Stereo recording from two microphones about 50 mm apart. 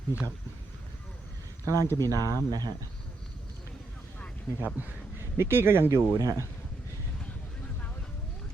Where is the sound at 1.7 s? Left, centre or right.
Right.